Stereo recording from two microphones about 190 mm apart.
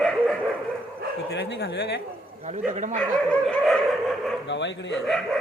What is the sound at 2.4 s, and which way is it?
Speech, 40° right (ahead or behind).